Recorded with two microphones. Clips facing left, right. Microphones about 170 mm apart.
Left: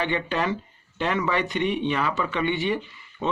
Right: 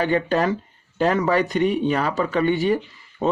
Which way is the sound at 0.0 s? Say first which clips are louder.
Right 6 dB; 40° right (ahead or behind).